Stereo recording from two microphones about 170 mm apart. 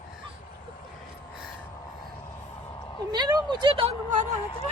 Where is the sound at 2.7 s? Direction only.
20° left (ahead or behind).